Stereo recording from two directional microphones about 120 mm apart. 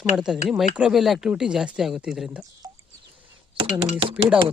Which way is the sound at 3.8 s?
50° right (ahead or behind).